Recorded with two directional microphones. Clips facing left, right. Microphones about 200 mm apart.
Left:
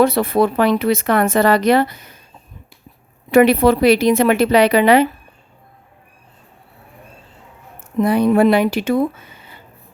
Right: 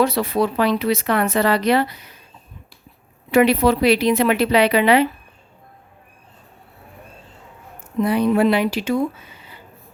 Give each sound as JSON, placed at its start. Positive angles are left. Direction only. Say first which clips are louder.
{"t": 0.0, "sound": "speech", "louder": "left 4 dB", "side_deg": 50}
{"t": 3.3, "sound": "speech", "louder": "left 4 dB", "side_deg": 50}
{"t": 7.9, "sound": "speech", "louder": "left 3 dB", "side_deg": 50}